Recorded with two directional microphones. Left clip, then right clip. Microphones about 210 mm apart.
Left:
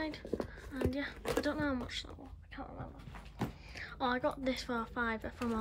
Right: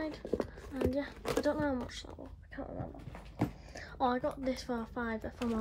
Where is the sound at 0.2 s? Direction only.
Centre (ahead or behind).